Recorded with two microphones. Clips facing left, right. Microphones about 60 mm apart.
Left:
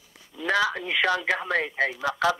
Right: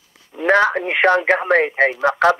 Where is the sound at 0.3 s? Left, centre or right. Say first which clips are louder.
Right 9 dB; right.